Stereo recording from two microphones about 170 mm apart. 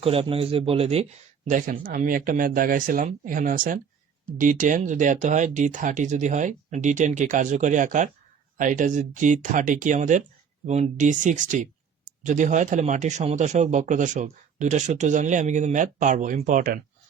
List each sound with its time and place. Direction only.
0.0 s speech: 35° right (ahead or behind)
1.5 s speech: 50° right (ahead or behind)